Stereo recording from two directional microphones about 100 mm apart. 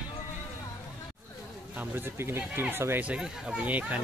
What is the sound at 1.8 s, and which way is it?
Speech, 20° right (ahead or behind).